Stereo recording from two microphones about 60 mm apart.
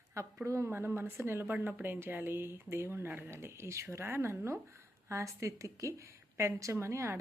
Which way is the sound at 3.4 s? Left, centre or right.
Right.